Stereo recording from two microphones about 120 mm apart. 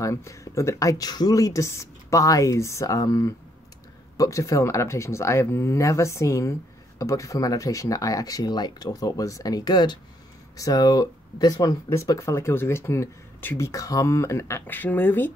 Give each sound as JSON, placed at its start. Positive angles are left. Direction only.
{"t": 0.0, "sound": "speech", "side_deg": 25}